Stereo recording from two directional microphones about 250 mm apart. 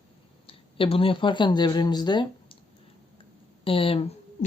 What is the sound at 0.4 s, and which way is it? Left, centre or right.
Speech, left.